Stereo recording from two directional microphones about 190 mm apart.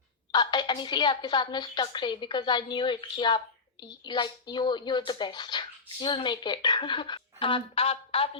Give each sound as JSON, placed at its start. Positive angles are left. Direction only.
{"t": 0.3, "sound": "a woman's voice", "side_deg": 25}